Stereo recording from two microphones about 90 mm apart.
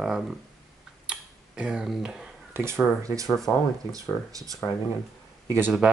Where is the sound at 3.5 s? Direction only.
10° left (ahead or behind).